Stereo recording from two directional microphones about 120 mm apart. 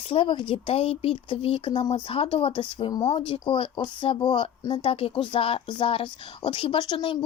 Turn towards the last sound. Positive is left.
turn(degrees=45)  # may be behind; listen again after turning